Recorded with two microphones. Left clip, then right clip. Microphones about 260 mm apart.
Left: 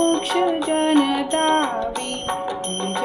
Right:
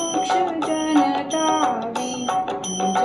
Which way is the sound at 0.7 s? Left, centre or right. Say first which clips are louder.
Even; left.